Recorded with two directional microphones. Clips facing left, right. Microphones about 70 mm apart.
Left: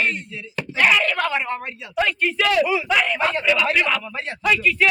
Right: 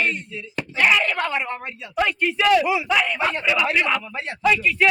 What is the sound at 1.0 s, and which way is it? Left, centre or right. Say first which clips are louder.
Speech: left 2 dB; centre.